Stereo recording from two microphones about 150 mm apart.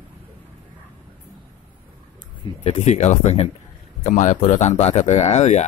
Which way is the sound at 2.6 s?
50° left (ahead or behind).